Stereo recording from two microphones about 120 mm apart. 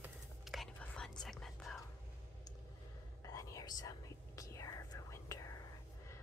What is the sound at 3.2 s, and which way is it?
Whispering, 30° left (ahead or behind).